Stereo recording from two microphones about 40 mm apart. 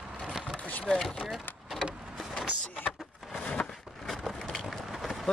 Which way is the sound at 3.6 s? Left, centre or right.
Left.